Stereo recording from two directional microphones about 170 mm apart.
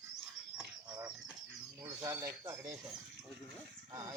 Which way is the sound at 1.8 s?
20° right (ahead or behind).